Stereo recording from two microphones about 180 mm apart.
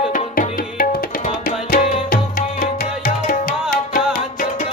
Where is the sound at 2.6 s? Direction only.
50° left (ahead or behind).